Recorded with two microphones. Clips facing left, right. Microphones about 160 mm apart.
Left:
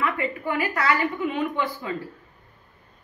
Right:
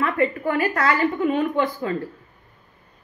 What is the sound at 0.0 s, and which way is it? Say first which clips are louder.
A woman's voice: right 5 dB; 45° right (ahead or behind).